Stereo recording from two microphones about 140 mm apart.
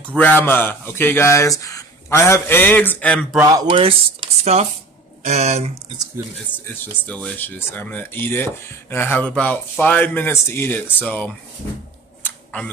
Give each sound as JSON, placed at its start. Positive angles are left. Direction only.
{"t": 0.1, "sound": "speech", "side_deg": 10}
{"t": 3.4, "sound": "speech", "side_deg": -35}
{"t": 6.5, "sound": "speech", "side_deg": 10}
{"t": 12.2, "sound": "a sound", "side_deg": 15}